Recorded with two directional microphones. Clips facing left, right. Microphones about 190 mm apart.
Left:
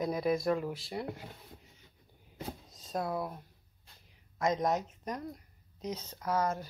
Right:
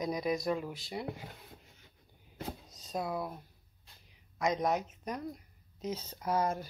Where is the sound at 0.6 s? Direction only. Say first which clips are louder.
Left 2 dB; centre (ahead or behind).